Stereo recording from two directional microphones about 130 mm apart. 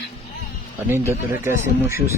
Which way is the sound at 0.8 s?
15° right (ahead or behind).